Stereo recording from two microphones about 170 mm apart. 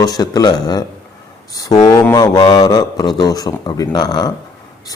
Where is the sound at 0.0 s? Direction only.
20° left (ahead or behind).